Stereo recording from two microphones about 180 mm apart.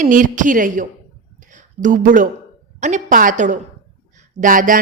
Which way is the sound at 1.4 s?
45° right (ahead or behind).